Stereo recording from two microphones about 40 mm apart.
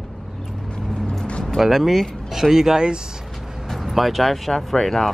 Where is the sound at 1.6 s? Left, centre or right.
Centre.